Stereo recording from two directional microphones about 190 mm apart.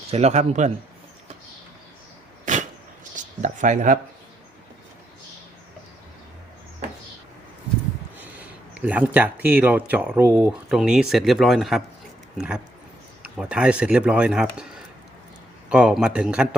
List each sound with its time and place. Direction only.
0.1 s speech: 35° right (ahead or behind)
2.4 s a sound: 40° right (ahead or behind)
3.2 s speech: 40° right (ahead or behind)
8.2 s speech: 10° right (ahead or behind)
15.7 s speech: 5° right (ahead or behind)